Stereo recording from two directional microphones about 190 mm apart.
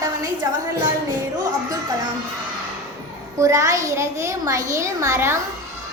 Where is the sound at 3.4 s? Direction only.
15° right (ahead or behind).